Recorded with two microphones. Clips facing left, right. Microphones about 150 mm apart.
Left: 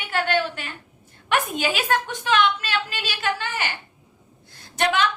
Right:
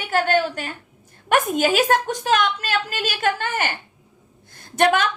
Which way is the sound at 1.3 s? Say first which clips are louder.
Right 5 dB; 45° right (ahead or behind).